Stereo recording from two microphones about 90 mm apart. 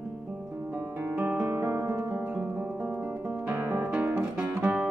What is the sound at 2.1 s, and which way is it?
Music, 15° right (ahead or behind).